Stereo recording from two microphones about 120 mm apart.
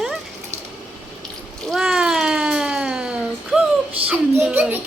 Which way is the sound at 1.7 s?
5° right (ahead or behind).